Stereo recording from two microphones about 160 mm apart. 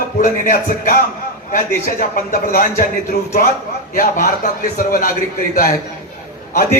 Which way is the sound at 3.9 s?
60° left (ahead or behind).